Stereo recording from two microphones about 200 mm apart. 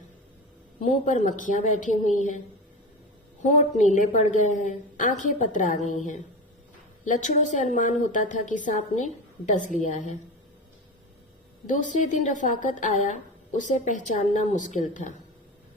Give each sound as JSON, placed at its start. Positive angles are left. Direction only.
{"t": 0.8, "sound": "a woman's voice", "side_deg": 35}
{"t": 3.8, "sound": "a woman's voice", "side_deg": 40}
{"t": 7.0, "sound": "a woman's voice", "side_deg": 40}
{"t": 11.7, "sound": "a woman's voice", "side_deg": 40}